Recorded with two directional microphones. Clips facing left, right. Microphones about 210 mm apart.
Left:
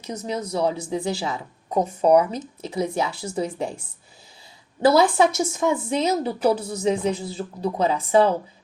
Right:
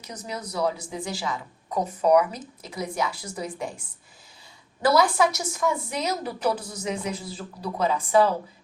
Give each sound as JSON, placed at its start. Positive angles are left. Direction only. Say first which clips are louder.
{"t": 0.0, "sound": "a woman's voice", "louder": "left 7 dB", "side_deg": 30}
{"t": 4.9, "sound": "speech", "louder": "left 4 dB", "side_deg": 25}